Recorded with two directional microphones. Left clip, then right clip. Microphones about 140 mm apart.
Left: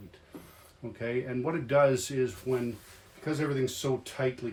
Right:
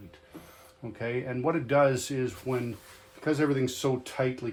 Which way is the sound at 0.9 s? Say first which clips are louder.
Even; 30° right (ahead or behind).